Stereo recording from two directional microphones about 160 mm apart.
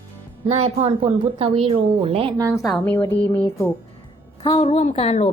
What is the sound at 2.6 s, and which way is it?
Speech, 5° left (ahead or behind).